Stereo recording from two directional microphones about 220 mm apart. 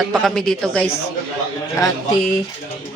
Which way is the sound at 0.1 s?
Centre (ahead or behind).